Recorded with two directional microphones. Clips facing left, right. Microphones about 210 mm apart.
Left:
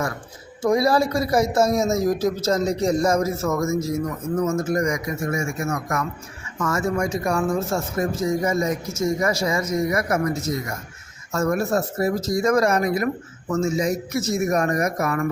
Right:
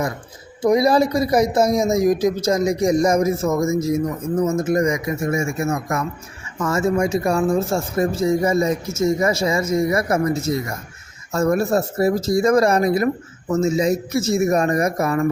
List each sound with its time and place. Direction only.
0.6 s speech: 20° right (ahead or behind)